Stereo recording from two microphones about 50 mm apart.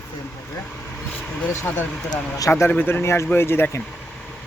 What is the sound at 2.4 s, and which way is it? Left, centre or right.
Speech, left.